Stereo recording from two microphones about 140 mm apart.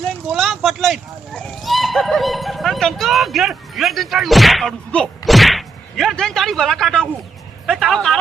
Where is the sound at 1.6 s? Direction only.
Centre (ahead or behind).